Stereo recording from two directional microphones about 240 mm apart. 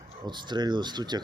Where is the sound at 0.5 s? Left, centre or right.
Centre.